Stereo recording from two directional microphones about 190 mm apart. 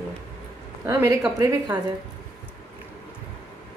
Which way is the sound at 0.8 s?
20° right (ahead or behind).